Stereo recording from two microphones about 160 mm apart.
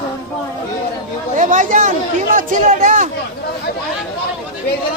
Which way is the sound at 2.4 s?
55° right (ahead or behind).